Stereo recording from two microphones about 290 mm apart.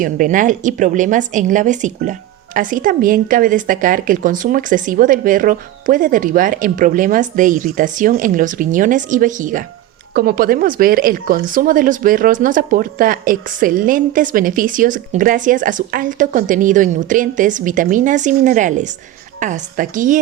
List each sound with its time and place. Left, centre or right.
0.0 s speech: right